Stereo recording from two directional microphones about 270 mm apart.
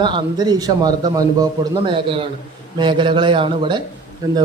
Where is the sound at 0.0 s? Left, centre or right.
Centre.